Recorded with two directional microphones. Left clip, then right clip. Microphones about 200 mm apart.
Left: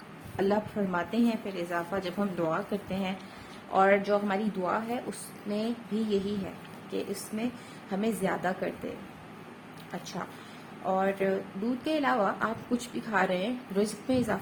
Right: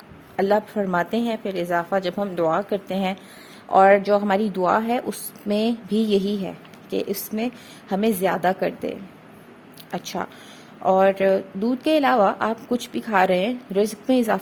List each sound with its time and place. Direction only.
0.3 s a woman's voice: 40° right (ahead or behind)
9.9 s a woman's voice: 45° right (ahead or behind)